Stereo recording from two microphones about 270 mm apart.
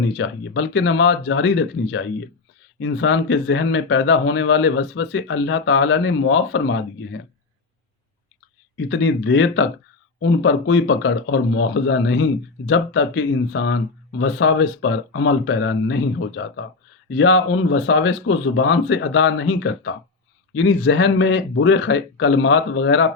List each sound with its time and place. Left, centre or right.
0.2 s speech: left
8.9 s speech: left